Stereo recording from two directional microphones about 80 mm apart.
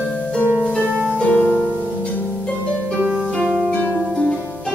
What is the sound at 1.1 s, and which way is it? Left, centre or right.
Harp, centre.